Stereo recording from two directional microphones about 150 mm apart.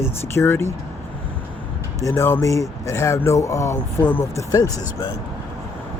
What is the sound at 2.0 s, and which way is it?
Speech, 15° left (ahead or behind).